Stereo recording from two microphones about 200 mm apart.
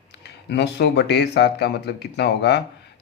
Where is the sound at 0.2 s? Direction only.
55° left (ahead or behind).